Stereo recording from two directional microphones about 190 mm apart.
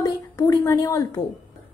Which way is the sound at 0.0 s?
15° left (ahead or behind).